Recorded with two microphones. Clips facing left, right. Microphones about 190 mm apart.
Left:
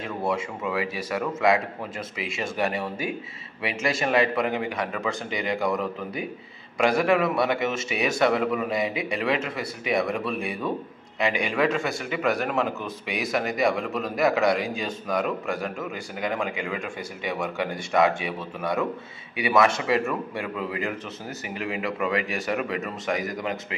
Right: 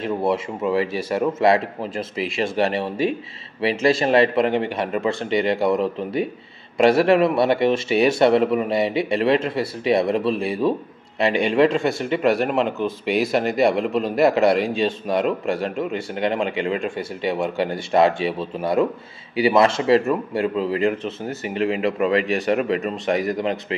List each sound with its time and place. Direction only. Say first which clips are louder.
0.0 s speech: right 6 dB; 25° right (ahead or behind)